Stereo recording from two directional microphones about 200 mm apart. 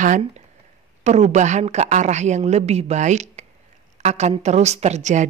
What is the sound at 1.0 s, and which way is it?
Speech, 35° right (ahead or behind).